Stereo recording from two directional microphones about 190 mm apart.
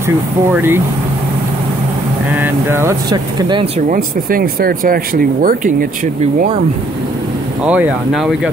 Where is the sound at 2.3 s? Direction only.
10° right (ahead or behind); by 3.8 s 30° right (ahead or behind).